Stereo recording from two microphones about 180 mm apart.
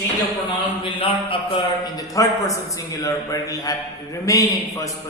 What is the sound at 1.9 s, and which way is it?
A man's voice, 20° left (ahead or behind).